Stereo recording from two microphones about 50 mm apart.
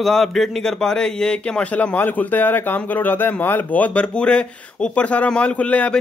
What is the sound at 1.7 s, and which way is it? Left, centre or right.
Speech, left.